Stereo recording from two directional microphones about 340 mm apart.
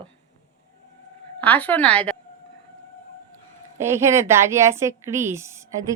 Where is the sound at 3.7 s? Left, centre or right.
Centre.